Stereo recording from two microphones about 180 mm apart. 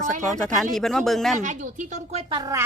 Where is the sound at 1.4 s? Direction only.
45° right (ahead or behind); by 2.6 s 20° right (ahead or behind).